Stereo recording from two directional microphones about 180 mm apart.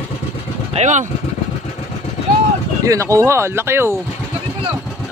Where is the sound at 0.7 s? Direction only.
40° right (ahead or behind).